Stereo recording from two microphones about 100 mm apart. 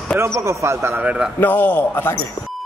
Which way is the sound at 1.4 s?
20° left (ahead or behind).